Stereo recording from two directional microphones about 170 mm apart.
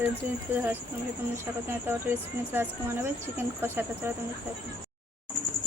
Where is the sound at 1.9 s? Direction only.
15° right (ahead or behind).